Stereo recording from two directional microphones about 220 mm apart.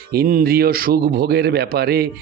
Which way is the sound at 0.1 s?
40° right (ahead or behind).